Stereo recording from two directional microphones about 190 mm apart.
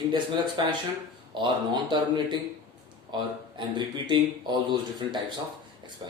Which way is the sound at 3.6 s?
25° right (ahead or behind).